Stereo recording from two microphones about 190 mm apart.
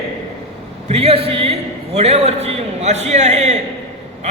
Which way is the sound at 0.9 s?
30° right (ahead or behind).